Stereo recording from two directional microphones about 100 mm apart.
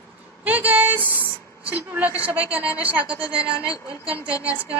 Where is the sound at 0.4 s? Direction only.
15° right (ahead or behind).